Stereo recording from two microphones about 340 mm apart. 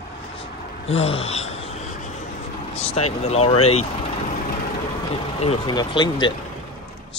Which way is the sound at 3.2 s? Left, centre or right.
Centre.